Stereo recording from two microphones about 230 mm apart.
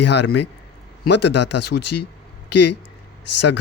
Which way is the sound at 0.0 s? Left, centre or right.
Left.